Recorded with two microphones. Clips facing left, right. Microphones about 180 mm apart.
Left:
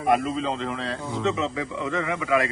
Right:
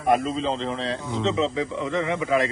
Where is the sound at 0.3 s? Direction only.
25° right (ahead or behind).